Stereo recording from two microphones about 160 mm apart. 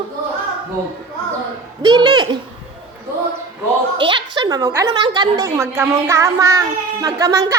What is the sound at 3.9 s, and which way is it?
A woman's voice, 30° right (ahead or behind).